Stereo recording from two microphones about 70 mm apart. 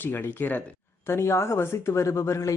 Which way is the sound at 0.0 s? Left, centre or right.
Left.